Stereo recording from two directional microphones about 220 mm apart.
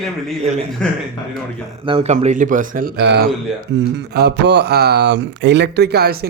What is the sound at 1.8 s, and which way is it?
A man's voice, 25° right (ahead or behind).